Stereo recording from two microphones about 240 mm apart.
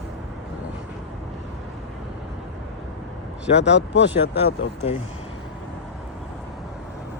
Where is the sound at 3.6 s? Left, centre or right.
Left.